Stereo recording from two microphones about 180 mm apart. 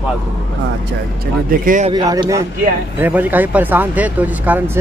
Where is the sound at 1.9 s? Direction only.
20° right (ahead or behind).